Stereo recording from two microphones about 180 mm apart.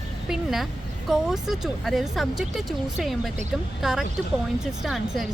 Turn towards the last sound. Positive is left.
turn(degrees=0)  # may be behind; listen again after turning